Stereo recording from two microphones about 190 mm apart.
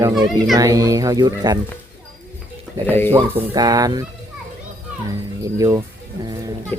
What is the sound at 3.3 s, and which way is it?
Speech, 15° right (ahead or behind).